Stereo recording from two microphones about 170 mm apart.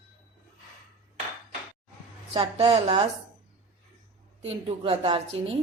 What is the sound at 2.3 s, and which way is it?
Speech, 35° right (ahead or behind).